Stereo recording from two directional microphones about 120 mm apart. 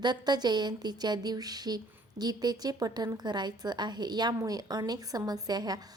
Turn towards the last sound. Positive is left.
turn(degrees=-35)  # may be behind; listen again after turning